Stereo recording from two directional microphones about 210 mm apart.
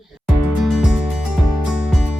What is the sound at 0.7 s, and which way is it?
Music, centre (ahead or behind).